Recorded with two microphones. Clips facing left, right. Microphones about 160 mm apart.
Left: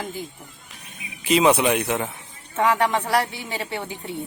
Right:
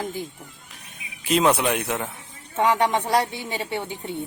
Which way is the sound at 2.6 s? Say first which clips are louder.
Even; 15° right (ahead or behind).